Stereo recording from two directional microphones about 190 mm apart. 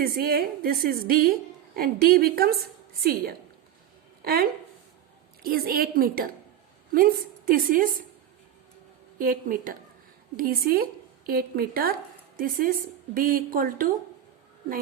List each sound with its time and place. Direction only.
0.0 s a woman's voice: 50° right (ahead or behind)
9.1 s a woman's voice: 50° right (ahead or behind)